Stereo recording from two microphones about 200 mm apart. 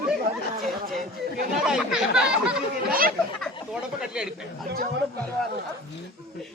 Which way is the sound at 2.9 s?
45° right (ahead or behind).